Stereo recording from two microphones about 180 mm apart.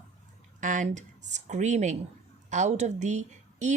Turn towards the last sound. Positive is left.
turn(degrees=-40)  # may be behind; listen again after turning